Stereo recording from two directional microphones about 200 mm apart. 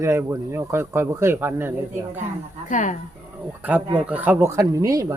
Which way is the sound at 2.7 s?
40° left (ahead or behind).